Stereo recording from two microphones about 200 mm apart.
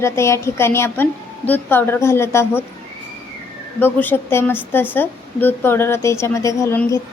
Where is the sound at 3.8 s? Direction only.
10° left (ahead or behind).